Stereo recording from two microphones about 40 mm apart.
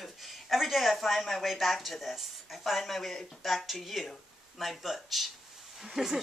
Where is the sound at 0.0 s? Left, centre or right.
Centre.